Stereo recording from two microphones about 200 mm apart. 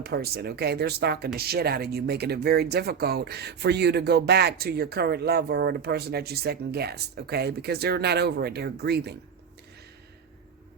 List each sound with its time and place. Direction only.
0.0 s speech: 50° right (ahead or behind)